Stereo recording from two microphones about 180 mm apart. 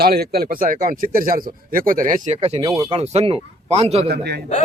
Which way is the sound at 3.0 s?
35° right (ahead or behind).